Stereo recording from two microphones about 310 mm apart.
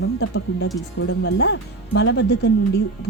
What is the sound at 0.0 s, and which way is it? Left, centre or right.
Speech, left.